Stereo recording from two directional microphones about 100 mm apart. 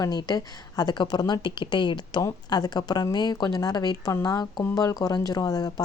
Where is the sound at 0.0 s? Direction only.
45° left (ahead or behind).